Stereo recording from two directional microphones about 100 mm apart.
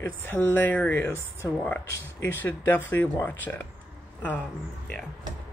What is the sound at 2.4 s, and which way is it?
Speech, 20° left (ahead or behind).